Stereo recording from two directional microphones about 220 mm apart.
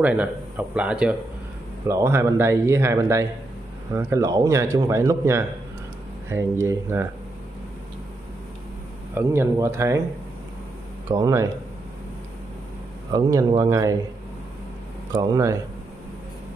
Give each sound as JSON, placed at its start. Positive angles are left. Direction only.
{"t": 0.0, "sound": "speech", "side_deg": -5}
{"t": 9.1, "sound": "speech", "side_deg": -10}
{"t": 11.1, "sound": "speech", "side_deg": -15}
{"t": 13.1, "sound": "speech", "side_deg": -15}
{"t": 15.2, "sound": "speech", "side_deg": -15}